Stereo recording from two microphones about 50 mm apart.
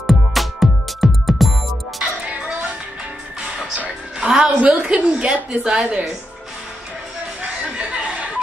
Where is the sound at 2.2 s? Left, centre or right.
Right.